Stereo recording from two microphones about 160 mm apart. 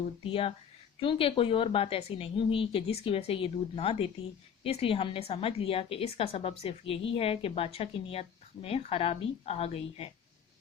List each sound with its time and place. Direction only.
0.2 s a woman's voice: 35° left (ahead or behind)